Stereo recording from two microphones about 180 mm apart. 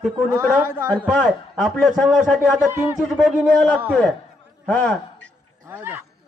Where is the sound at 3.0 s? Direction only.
Centre (ahead or behind).